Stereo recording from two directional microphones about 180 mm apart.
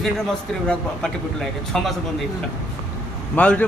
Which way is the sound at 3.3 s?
10° left (ahead or behind).